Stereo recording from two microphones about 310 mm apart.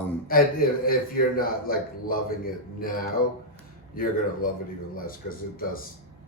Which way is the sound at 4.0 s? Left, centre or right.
Left.